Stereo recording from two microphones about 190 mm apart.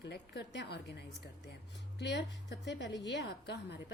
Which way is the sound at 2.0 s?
65° left (ahead or behind).